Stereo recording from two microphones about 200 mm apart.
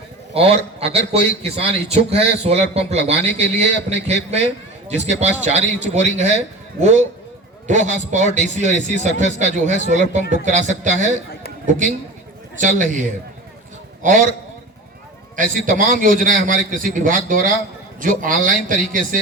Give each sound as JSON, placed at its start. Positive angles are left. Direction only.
{"t": 0.3, "sound": "a man's voice", "side_deg": -30}
{"t": 12.5, "sound": "a man's voice", "side_deg": -40}
{"t": 15.4, "sound": "a man's voice", "side_deg": -40}